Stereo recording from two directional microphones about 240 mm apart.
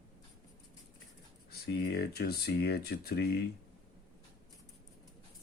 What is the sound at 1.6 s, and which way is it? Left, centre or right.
Speech, left.